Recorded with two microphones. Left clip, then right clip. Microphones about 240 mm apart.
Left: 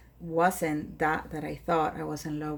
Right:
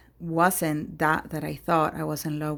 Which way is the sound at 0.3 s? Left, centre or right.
Right.